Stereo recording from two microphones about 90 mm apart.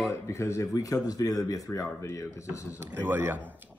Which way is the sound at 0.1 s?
35° left (ahead or behind).